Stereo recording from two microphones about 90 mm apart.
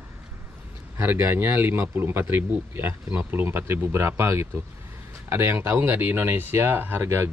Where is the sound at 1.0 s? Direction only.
25° right (ahead or behind).